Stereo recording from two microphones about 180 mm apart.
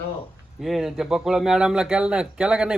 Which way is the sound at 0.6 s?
Centre (ahead or behind).